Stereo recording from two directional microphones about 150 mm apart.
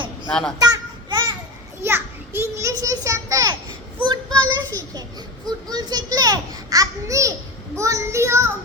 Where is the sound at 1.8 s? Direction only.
15° right (ahead or behind).